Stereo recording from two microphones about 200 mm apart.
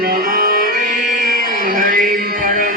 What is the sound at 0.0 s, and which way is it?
Music, 45° right (ahead or behind).